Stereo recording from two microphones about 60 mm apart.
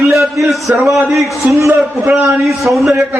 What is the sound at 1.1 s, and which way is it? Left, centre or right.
Speech, right.